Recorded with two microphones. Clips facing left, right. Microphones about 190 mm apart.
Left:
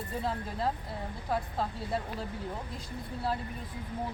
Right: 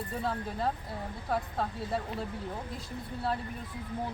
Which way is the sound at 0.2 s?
Centre (ahead or behind).